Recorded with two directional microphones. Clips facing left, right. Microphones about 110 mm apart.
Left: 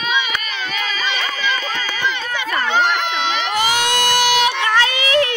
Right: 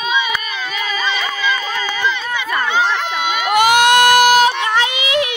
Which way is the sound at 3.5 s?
55° right (ahead or behind).